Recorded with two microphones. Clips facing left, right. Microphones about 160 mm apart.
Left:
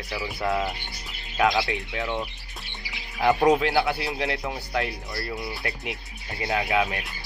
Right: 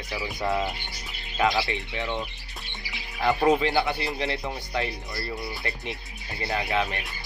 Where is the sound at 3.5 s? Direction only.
Centre (ahead or behind).